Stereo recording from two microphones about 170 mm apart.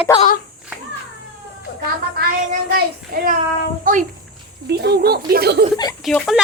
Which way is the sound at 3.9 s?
50° right (ahead or behind).